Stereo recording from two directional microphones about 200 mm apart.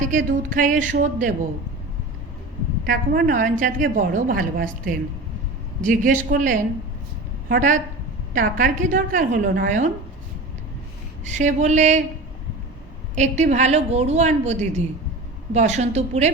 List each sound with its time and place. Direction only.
0.5 s a woman's voice: 40° right (ahead or behind)
2.8 s a woman's voice: 45° right (ahead or behind)
11.3 s a woman's voice: 35° right (ahead or behind)
13.1 s a woman's voice: 35° right (ahead or behind)